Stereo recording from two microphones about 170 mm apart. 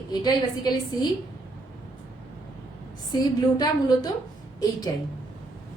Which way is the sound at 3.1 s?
25° left (ahead or behind).